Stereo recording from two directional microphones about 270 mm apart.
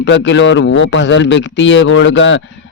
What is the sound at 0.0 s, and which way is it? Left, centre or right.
A man's voice, left.